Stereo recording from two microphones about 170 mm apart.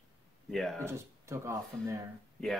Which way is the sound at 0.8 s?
15° right (ahead or behind).